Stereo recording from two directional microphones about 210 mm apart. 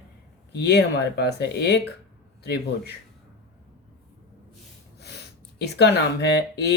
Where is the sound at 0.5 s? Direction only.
50° left (ahead or behind).